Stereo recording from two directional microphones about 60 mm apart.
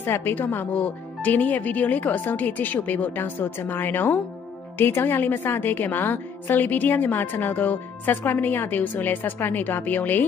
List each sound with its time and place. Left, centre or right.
0.0 s a woman's voice: left